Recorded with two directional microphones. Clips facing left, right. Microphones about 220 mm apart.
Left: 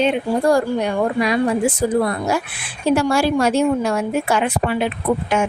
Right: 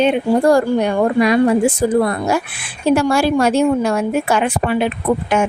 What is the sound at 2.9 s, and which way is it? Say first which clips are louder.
A woman's voice: right 2 dB; 60° right (ahead or behind).